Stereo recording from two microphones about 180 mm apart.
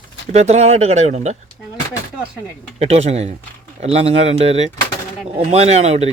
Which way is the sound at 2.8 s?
35° right (ahead or behind).